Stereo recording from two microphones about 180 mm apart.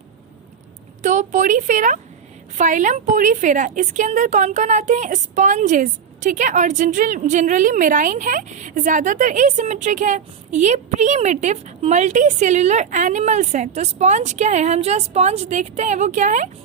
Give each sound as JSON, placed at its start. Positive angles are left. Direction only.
{"t": 1.0, "sound": "a woman's voice", "side_deg": -45}